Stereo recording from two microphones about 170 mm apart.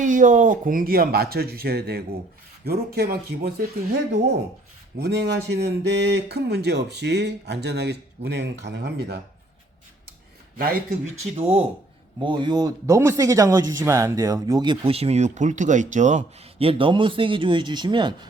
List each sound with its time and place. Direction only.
0.0 s speech: 50° right (ahead or behind); by 4.4 s 85° right
4.9 s speech: 75° right (ahead or behind)
11.3 s speech: 35° right (ahead or behind)